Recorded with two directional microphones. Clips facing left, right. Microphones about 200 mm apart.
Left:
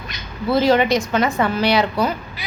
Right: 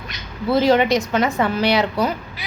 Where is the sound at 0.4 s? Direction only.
20° right (ahead or behind).